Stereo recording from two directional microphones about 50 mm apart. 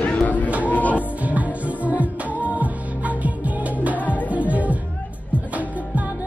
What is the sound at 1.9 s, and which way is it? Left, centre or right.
Music, right.